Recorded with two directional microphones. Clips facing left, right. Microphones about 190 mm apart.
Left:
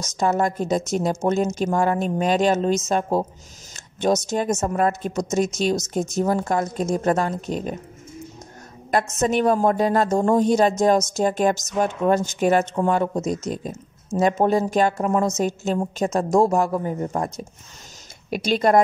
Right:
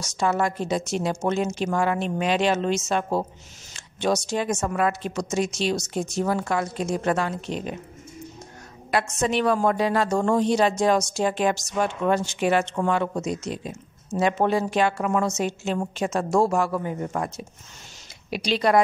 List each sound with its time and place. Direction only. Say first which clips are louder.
0.2 s a woman's voice: left 3 dB; 45° left (ahead or behind)
3.7 s a sound: left 3 dB; 45° left (ahead or behind)
4.3 s a woman's voice: left 3 dB; 40° left (ahead or behind)
9.2 s a woman's voice: left 3 dB; 45° left (ahead or behind)
18.3 s a woman's voice: left 3 dB; 50° left (ahead or behind)